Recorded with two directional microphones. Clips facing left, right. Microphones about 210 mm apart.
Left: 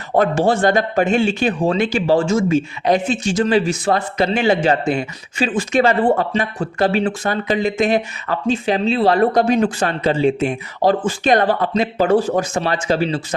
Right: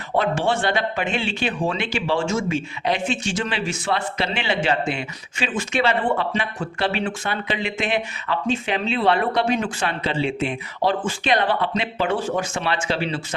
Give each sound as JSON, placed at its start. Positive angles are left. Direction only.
{"t": 0.2, "sound": "speech", "side_deg": 40}